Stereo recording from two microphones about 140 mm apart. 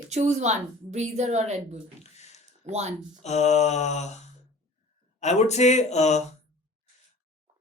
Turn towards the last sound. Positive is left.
turn(degrees=55)  # may be behind; listen again after turning